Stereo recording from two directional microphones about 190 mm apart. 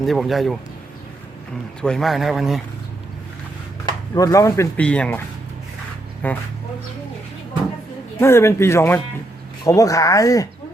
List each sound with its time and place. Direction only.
0.0 s speech: centre (ahead or behind)
1.8 s speech: centre (ahead or behind)
4.1 s speech: 15° left (ahead or behind)
6.2 s speech: 10° left (ahead or behind)
8.2 s speech: 15° left (ahead or behind)